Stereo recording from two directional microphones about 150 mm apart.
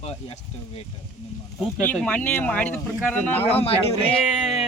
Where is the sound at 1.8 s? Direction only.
10° left (ahead or behind).